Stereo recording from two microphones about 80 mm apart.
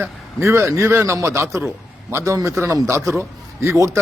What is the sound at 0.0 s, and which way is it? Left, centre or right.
Speech, right.